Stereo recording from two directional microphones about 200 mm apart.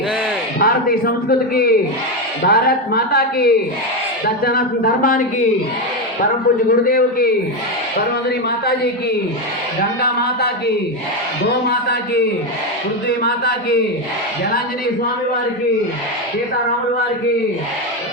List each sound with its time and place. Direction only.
0.6 s a man's voice: 45° left (ahead or behind)
6.7 s a man's voice: 45° left (ahead or behind)
10.0 s a sound: 50° left (ahead or behind)
11.4 s a man's voice: 55° left (ahead or behind)